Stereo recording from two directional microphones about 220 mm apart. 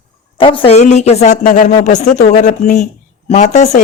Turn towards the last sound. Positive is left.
turn(degrees=30)  # may be behind; listen again after turning